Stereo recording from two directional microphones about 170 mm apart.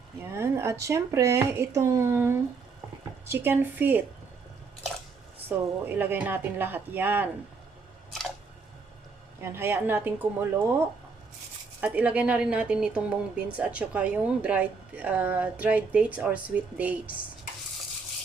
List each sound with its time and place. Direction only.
0.2 s speech: 15° right (ahead or behind)
5.5 s speech: 10° right (ahead or behind)
9.4 s speech: 15° right (ahead or behind)